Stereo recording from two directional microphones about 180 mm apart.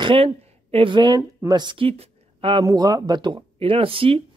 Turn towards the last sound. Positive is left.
turn(degrees=-30)  # may be behind; listen again after turning